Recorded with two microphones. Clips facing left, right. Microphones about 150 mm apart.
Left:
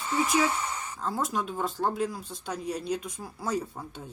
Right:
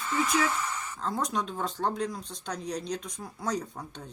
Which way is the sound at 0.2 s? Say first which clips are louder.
Left 2 dB; 15° left (ahead or behind).